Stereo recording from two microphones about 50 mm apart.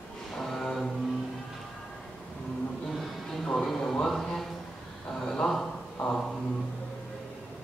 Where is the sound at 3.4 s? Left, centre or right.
Centre.